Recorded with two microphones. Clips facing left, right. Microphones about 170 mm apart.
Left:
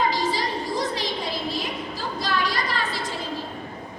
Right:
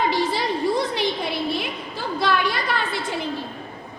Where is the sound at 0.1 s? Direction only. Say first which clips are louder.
Right 3 dB; 60° right (ahead or behind).